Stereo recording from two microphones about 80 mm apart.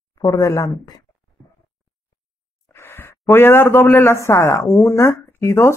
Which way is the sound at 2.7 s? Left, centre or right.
Left.